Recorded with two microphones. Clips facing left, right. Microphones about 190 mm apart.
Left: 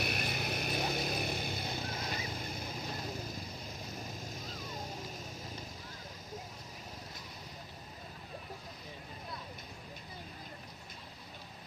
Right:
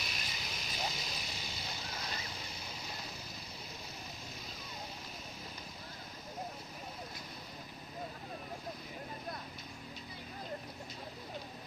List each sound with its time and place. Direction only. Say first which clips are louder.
0.0 s vehicle: left 9 dB; 60° left (ahead or behind)